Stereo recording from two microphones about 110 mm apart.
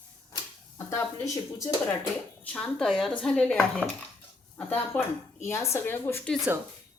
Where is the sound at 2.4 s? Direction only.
10° left (ahead or behind).